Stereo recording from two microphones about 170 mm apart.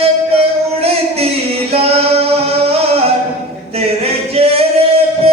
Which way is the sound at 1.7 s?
35° right (ahead or behind).